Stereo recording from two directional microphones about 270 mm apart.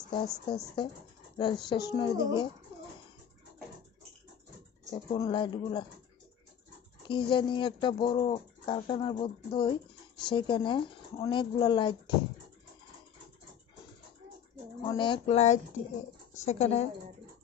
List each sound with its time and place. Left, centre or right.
0.5 s speech: centre
4.9 s speech: centre
7.1 s speech: centre
14.8 s speech: centre